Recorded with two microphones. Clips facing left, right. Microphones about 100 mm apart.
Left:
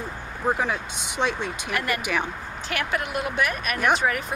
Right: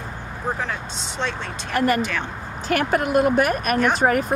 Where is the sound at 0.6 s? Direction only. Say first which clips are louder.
Left 1 dB; 15° left (ahead or behind).